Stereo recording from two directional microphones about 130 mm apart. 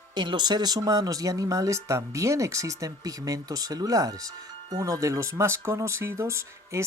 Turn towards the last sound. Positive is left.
turn(degrees=-20)  # may be behind; listen again after turning